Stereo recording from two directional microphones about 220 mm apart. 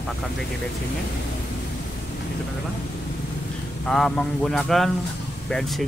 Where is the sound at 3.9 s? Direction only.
Centre (ahead or behind).